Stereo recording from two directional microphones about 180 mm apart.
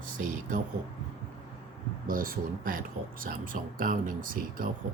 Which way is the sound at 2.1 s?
50° right (ahead or behind).